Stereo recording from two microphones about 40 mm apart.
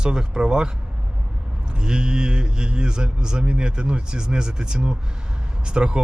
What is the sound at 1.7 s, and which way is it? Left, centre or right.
Speech, right.